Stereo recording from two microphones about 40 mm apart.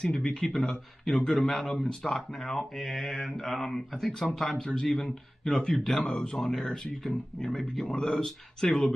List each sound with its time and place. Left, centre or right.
0.0 s speech: left
0.5 s speech: centre
1.1 s speech: left